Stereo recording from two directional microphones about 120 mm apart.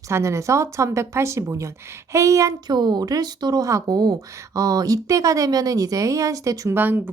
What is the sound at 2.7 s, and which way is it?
Speech, 35° right (ahead or behind).